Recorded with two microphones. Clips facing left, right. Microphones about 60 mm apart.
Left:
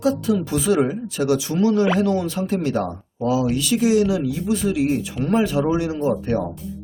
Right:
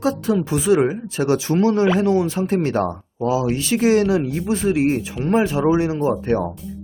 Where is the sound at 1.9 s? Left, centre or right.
Right.